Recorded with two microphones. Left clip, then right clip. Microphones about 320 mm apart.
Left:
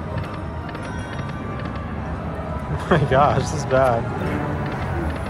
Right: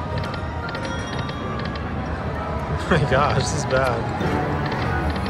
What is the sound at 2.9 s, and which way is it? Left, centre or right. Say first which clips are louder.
Speech: left 3 dB; centre.